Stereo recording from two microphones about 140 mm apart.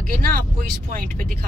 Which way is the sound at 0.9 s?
90° right.